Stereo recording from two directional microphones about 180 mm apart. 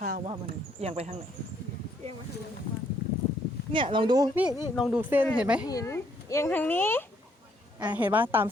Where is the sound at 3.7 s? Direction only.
25° right (ahead or behind).